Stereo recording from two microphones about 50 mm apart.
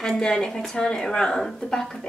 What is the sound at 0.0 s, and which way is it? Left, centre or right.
A woman's voice, centre.